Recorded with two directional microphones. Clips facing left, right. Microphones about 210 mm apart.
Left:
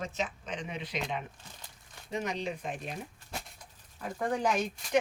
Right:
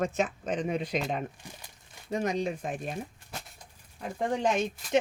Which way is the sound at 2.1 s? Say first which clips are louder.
Right 5 dB; 45° right (ahead or behind).